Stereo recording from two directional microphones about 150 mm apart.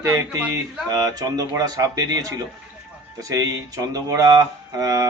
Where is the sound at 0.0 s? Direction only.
20° right (ahead or behind).